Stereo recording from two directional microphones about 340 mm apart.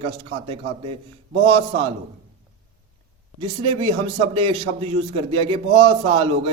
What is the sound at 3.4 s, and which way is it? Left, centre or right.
A man's voice, centre.